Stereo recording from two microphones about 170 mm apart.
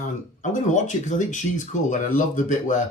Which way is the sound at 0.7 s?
45° left (ahead or behind).